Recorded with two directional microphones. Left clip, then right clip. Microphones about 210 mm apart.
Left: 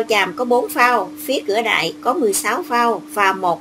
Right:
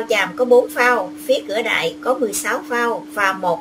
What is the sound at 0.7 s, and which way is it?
A woman's voice, 40° left (ahead or behind).